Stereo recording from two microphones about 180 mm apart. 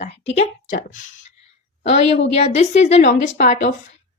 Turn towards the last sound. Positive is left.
turn(degrees=40)  # may be behind; listen again after turning